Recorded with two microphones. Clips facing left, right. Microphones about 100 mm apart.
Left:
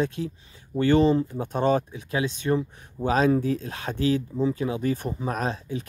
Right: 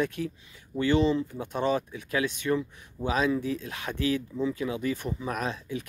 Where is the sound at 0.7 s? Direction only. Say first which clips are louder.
Left 4 dB; 40° left (ahead or behind).